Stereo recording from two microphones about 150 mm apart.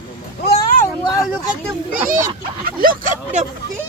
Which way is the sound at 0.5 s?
70° left (ahead or behind).